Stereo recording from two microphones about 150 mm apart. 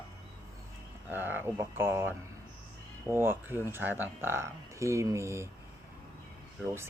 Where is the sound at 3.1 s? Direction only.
15° right (ahead or behind).